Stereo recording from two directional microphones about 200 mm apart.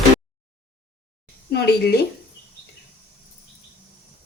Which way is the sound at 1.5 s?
55° left (ahead or behind).